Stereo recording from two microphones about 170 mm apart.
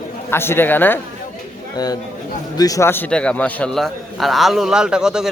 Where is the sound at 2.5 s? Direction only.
20° left (ahead or behind); by 5.3 s 5° right (ahead or behind).